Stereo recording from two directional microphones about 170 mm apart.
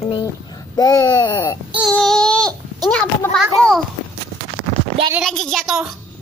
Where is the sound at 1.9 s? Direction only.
5° left (ahead or behind).